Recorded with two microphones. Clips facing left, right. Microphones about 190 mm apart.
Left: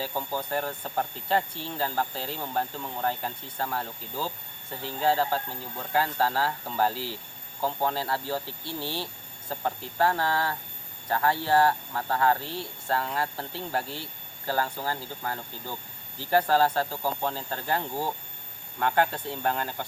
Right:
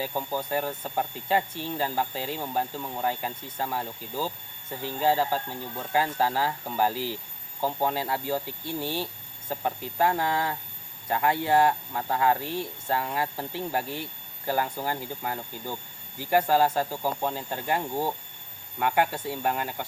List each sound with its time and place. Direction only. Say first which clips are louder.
0.0 s speech: right 1 dB; 10° right (ahead or behind)